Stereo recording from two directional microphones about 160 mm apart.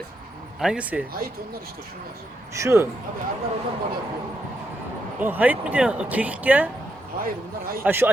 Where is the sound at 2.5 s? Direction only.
20° right (ahead or behind).